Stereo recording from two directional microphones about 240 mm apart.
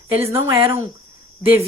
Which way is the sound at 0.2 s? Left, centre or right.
Centre.